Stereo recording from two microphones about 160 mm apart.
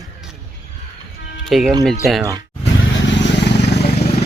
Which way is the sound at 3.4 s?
90° left.